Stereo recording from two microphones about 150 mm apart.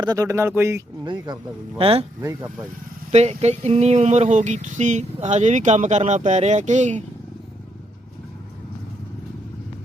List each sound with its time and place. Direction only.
0.0 s speech: 25° right (ahead or behind)
1.0 s speech: 30° right (ahead or behind)
3.1 s speech: 45° right (ahead or behind)